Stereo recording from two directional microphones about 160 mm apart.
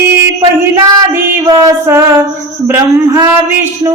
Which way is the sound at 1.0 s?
25° right (ahead or behind).